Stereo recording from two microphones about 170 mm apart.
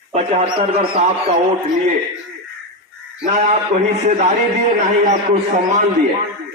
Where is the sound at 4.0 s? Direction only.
40° right (ahead or behind).